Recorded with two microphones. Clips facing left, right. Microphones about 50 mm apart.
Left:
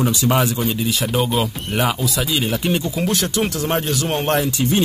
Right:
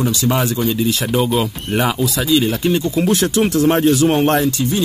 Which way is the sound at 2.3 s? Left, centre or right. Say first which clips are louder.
Right 6 dB; centre.